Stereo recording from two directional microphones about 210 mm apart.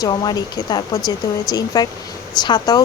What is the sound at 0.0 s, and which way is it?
Speech, 20° left (ahead or behind).